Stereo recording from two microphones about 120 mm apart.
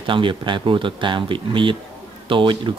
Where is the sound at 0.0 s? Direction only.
45° right (ahead or behind).